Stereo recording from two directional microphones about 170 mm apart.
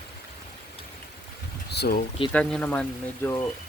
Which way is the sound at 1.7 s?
70° left (ahead or behind).